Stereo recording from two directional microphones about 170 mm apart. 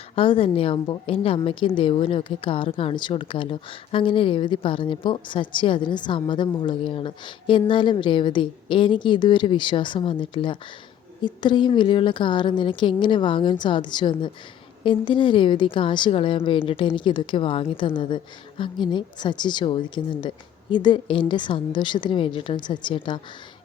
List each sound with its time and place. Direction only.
0.2 s a woman's voice: 30° left (ahead or behind)